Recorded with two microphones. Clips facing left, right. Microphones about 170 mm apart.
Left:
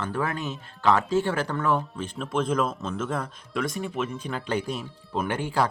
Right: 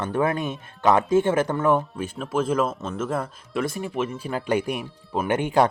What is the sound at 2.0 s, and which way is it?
Speech, 5° right (ahead or behind).